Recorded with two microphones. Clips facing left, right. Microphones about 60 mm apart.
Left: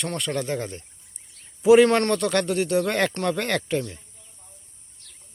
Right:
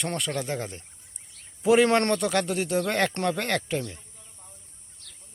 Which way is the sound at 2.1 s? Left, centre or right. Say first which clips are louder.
Left 3 dB; centre.